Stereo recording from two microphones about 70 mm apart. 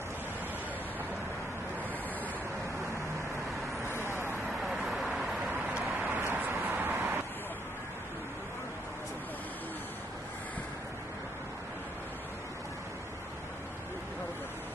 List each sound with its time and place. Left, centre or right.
4.0 s vehicle: right
4.6 s vehicle: centre
5.9 s vehicle: right